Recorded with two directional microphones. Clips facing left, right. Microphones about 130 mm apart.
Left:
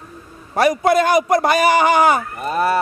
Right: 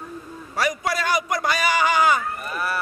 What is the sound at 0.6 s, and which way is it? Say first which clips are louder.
A man's voice: left 10 dB; 55° left (ahead or behind).